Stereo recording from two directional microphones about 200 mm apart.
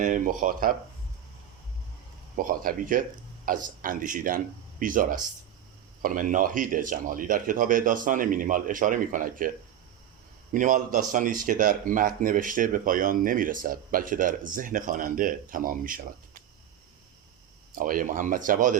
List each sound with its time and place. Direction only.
0.0 s speech: 40° right (ahead or behind)
2.3 s speech: 45° right (ahead or behind)
10.5 s speech: 40° right (ahead or behind)
17.7 s speech: 45° right (ahead or behind)